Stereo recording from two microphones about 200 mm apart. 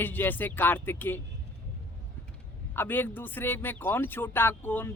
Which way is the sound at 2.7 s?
10° left (ahead or behind).